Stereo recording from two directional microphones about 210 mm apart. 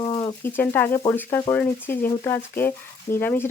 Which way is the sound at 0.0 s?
20° left (ahead or behind).